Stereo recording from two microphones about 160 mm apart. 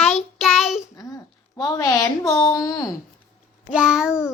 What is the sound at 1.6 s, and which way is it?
Speech, 20° left (ahead or behind).